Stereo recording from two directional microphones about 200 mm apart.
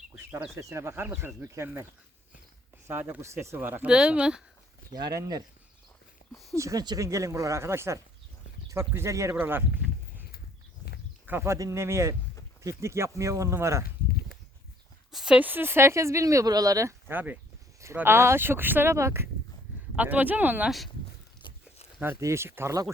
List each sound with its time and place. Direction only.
0.3 s speech: 10° right (ahead or behind)
4.9 s speech: 20° right (ahead or behind)
6.6 s speech: 15° right (ahead or behind)
11.3 s speech: 10° right (ahead or behind)
15.1 s speech: 5° right (ahead or behind)
21.9 s speech: 10° right (ahead or behind)